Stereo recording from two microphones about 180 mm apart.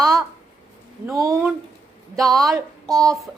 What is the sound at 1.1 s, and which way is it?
Speech, 20° right (ahead or behind).